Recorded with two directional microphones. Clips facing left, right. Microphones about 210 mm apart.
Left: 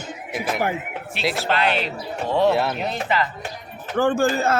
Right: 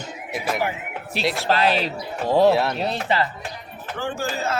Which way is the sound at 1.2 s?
Centre (ahead or behind).